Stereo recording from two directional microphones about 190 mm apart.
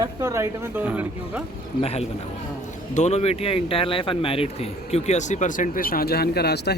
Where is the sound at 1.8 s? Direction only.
30° left (ahead or behind); by 6.7 s 60° left (ahead or behind).